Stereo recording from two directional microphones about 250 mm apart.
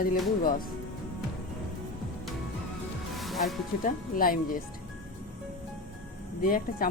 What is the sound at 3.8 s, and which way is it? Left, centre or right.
Speech, left.